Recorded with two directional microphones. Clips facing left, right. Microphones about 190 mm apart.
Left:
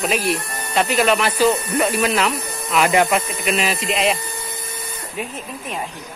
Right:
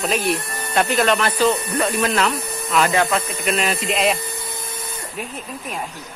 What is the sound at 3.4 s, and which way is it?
Speech, centre (ahead or behind).